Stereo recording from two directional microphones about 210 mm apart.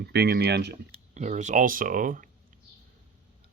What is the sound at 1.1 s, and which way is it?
Speech, 35° right (ahead or behind).